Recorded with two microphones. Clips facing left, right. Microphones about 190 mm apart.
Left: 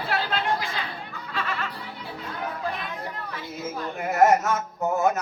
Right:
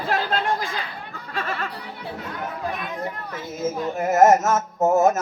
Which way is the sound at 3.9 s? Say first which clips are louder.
Right 3 dB; 45° right (ahead or behind).